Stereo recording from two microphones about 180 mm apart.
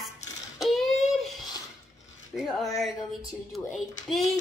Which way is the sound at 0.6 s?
Centre (ahead or behind).